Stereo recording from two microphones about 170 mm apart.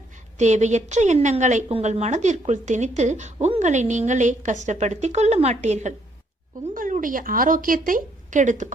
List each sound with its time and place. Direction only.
0.3 s a woman's voice: 40° right (ahead or behind)